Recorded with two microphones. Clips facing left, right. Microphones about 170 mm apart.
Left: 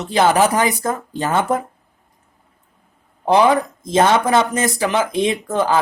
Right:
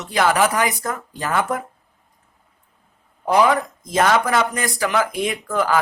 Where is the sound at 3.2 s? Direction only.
25° left (ahead or behind).